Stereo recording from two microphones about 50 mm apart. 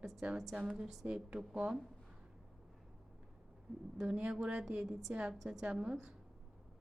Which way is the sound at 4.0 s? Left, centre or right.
Centre.